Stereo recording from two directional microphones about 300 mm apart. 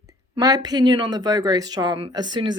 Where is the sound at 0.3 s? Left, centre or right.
Centre.